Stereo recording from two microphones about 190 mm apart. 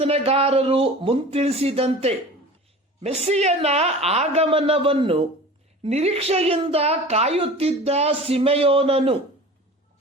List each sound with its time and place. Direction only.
0.0 s a woman's voice: 30° right (ahead or behind)